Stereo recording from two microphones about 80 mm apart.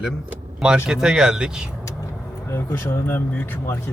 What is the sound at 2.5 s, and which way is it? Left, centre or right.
Speech, left.